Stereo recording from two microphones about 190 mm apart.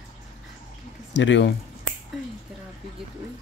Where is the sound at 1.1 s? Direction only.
70° left (ahead or behind).